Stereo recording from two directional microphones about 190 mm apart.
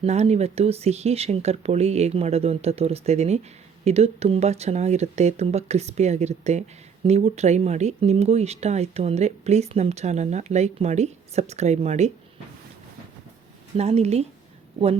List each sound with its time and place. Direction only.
0.0 s speech: 35° right (ahead or behind)
13.7 s speech: 35° right (ahead or behind)